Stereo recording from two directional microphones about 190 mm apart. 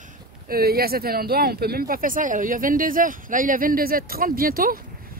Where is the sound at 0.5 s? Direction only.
55° right (ahead or behind).